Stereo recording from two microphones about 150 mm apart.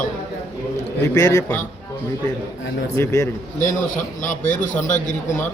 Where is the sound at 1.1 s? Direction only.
20° left (ahead or behind).